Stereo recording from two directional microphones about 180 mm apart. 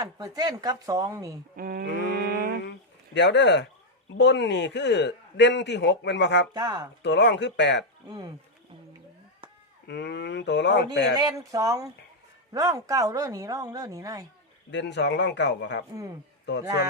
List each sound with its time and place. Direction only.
0.0 s speech: 20° right (ahead or behind)
1.5 s a sound: 55° right (ahead or behind)
3.2 s a man's voice: 75° left (ahead or behind)
6.5 s speech: 25° right (ahead or behind)
7.0 s a man's voice: 80° left
8.0 s speech: 20° right (ahead or behind)
9.8 s a man's voice: 75° left (ahead or behind)
11.1 s speech: 20° right (ahead or behind)
14.7 s a man's voice: 75° left (ahead or behind)